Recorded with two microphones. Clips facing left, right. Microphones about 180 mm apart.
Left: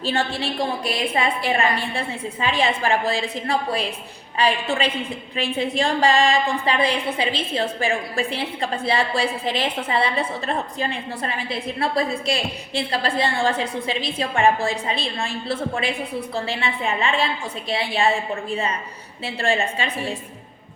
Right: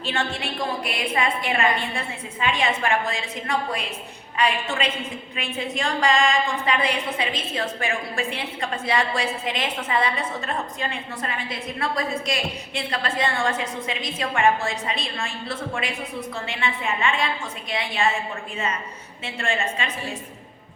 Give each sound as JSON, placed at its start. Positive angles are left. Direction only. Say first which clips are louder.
{"t": 0.0, "sound": "a woman's voice", "louder": "left 4 dB", "side_deg": 35}